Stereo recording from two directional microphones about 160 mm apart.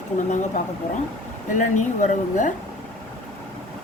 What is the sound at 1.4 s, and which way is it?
Speech, 50° left (ahead or behind).